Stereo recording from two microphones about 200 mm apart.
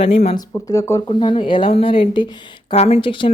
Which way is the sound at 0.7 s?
15° left (ahead or behind).